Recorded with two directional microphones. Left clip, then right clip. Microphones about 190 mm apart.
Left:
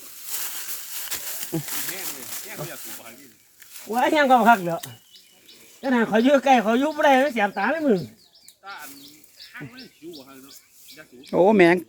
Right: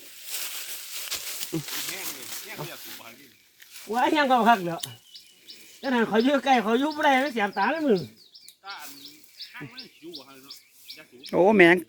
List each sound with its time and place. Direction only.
0.0 s a sound: 60° left (ahead or behind)
3.8 s speech: 10° left (ahead or behind)
5.8 s speech: 10° left (ahead or behind)
6.1 s speech: 20° left (ahead or behind)
7.7 s speech: 10° left (ahead or behind)
8.6 s a sound: 55° left (ahead or behind)
11.2 s speech: centre (ahead or behind)